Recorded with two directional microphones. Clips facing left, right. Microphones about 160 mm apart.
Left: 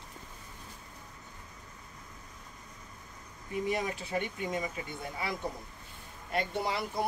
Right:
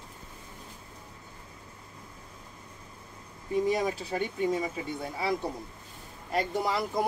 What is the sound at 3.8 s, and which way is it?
Speech, 35° right (ahead or behind).